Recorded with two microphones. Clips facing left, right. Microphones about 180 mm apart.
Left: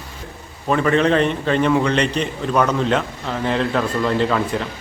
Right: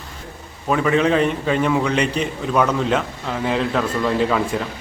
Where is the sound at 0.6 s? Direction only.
5° right (ahead or behind).